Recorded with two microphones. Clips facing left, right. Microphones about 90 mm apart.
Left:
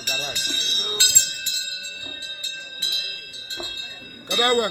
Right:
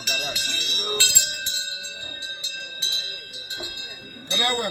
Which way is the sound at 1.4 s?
25° right (ahead or behind).